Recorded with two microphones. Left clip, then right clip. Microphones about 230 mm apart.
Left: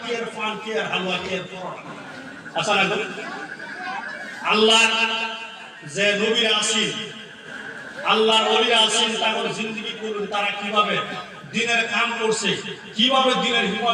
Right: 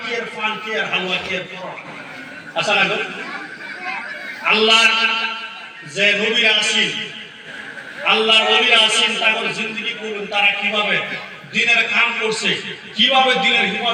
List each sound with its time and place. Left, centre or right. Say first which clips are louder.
0.4 s a man's voice: right 5 dB; left
4.4 s a man's voice: right 3 dB; left